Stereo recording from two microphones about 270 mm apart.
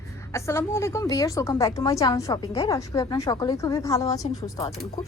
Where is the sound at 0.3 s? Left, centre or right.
Centre.